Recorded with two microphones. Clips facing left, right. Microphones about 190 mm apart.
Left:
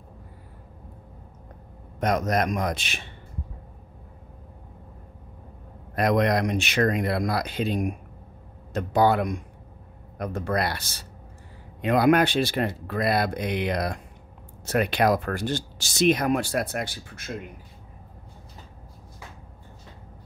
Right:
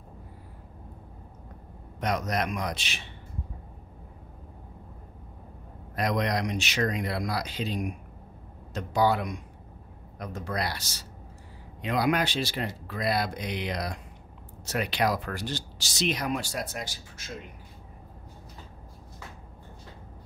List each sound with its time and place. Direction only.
2.0 s speech: 50° left (ahead or behind)
5.9 s speech: 55° left (ahead or behind)